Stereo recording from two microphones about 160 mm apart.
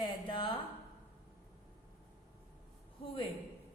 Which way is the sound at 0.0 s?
30° left (ahead or behind).